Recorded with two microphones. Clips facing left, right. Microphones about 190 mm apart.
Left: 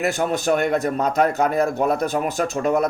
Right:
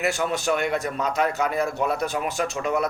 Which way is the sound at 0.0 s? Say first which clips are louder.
Left 3 dB; 45° left (ahead or behind).